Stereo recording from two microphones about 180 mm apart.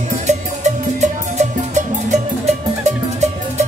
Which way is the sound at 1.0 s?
40° right (ahead or behind).